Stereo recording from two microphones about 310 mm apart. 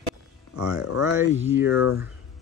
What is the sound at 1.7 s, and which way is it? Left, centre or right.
Speech, left.